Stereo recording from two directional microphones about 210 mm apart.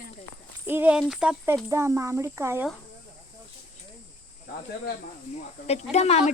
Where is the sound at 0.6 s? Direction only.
10° right (ahead or behind).